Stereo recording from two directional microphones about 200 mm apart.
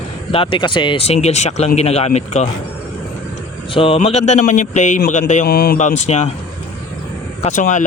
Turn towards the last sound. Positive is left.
turn(degrees=40)  # may be behind; listen again after turning